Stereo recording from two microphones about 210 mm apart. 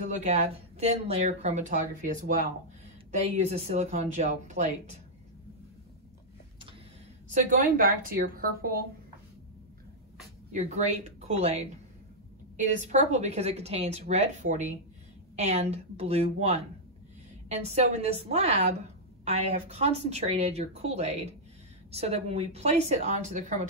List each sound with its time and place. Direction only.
0.1 s speech: 30° right (ahead or behind)
7.2 s a woman's voice: 40° right (ahead or behind)
10.5 s speech: 30° right (ahead or behind)